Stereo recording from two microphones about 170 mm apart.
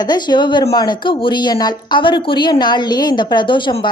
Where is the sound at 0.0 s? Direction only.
25° left (ahead or behind).